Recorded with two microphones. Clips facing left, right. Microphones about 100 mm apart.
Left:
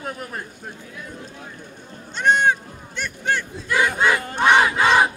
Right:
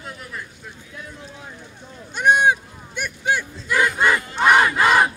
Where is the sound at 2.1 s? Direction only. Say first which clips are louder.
Right 1 dB; 10° right (ahead or behind).